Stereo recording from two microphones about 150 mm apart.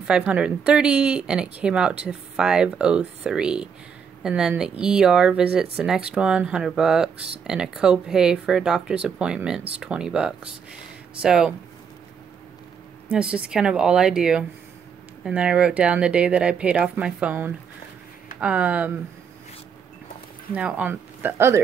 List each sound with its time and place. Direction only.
0.0 s speech: 5° right (ahead or behind)
13.1 s speech: 5° right (ahead or behind)
20.5 s speech: 10° right (ahead or behind)